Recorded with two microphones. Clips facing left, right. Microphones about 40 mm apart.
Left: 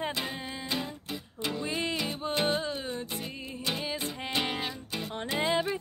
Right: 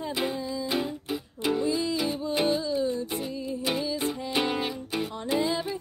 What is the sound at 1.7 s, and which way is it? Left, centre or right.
Music, left.